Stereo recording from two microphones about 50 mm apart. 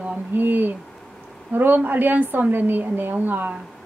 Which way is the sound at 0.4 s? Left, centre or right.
Right.